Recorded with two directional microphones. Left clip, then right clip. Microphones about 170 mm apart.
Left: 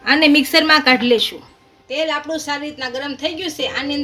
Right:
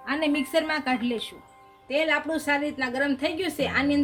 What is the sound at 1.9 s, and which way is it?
A woman's voice, 55° right (ahead or behind).